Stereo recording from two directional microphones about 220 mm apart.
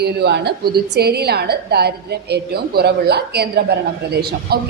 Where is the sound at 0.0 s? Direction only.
50° right (ahead or behind).